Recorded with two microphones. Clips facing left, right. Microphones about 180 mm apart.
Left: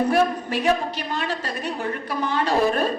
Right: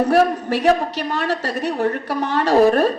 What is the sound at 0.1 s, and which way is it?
A woman's voice, 40° right (ahead or behind).